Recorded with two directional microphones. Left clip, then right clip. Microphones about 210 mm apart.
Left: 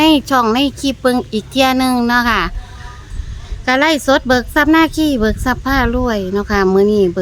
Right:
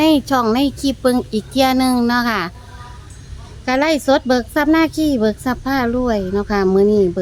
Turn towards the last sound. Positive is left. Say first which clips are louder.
# left 2 dB
turn(degrees=20)  # may be behind; listen again after turning